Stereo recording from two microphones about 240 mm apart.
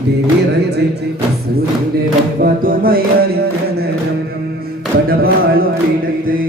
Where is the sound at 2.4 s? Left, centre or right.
Right.